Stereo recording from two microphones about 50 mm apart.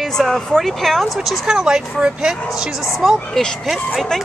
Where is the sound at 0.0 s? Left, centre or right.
Centre.